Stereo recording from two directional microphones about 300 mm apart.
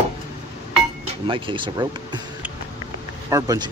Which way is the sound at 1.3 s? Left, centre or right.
Centre.